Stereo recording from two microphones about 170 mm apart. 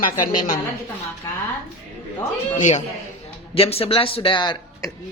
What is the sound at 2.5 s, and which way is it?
Speech, 45° left (ahead or behind).